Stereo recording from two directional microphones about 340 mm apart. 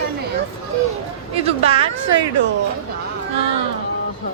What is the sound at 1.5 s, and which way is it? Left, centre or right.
Speech, centre.